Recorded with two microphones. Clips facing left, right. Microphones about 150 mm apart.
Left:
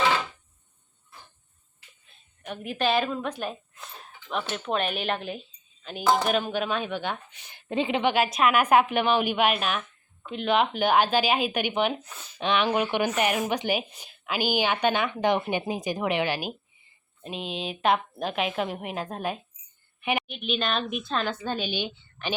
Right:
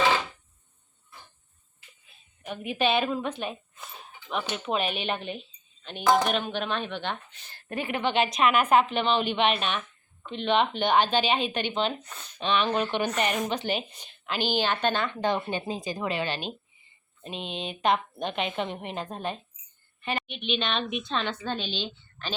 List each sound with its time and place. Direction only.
2.0 s a woman's voice: 5° right (ahead or behind)
7.7 s a woman's voice: 20° left (ahead or behind)
8.1 s a woman's voice: 5° left (ahead or behind)